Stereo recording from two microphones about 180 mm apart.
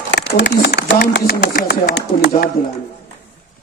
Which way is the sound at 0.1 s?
75° left (ahead or behind).